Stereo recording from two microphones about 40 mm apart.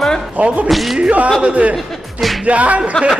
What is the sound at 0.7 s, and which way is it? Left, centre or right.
Speech, centre.